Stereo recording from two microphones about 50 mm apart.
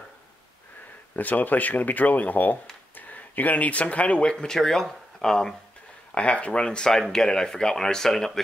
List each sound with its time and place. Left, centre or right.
1.1 s speech: left; by 5.5 s centre
6.1 s speech: left; by 8.3 s centre